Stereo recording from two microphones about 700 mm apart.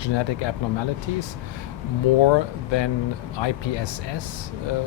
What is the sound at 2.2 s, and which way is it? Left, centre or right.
Speech, left.